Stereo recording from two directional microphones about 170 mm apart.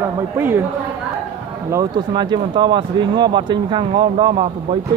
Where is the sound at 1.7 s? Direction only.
25° right (ahead or behind).